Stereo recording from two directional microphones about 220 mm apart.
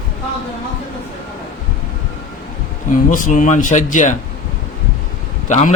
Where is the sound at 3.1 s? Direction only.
35° left (ahead or behind).